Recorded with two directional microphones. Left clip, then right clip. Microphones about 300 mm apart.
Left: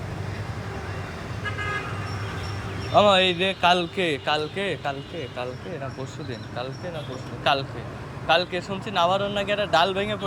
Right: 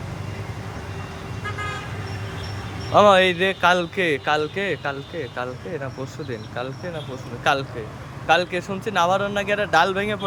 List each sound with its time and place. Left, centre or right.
2.9 s speech: centre
7.5 s speech: centre